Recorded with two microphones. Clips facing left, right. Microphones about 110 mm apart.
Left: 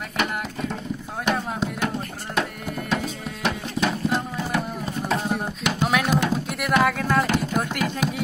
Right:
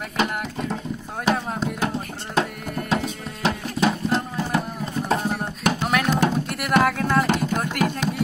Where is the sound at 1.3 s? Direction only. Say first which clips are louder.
Right 1 dB; centre (ahead or behind).